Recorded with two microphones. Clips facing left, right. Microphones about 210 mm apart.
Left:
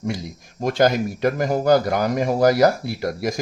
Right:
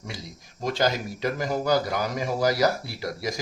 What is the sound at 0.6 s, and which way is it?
A man's voice, 50° left (ahead or behind).